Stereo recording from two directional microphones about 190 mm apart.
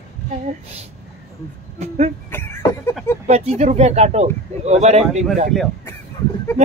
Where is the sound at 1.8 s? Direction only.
35° right (ahead or behind).